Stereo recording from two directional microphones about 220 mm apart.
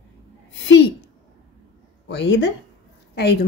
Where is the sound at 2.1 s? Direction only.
55° left (ahead or behind).